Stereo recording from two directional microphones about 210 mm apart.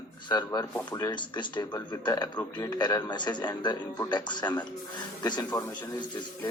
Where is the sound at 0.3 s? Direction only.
20° left (ahead or behind).